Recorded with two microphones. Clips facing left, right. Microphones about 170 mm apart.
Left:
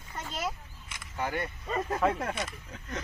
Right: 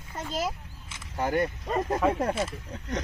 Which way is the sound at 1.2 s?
40° right (ahead or behind).